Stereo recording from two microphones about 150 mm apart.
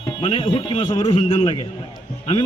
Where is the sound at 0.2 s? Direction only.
35° left (ahead or behind).